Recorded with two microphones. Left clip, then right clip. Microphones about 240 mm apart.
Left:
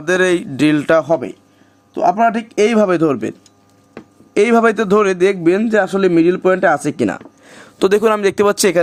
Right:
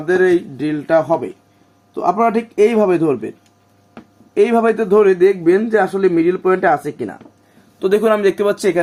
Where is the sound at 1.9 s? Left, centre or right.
Left.